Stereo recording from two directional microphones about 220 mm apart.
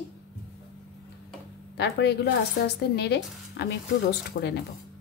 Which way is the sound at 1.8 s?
50° left (ahead or behind).